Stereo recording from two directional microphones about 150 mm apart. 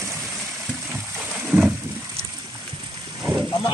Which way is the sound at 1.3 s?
5° right (ahead or behind).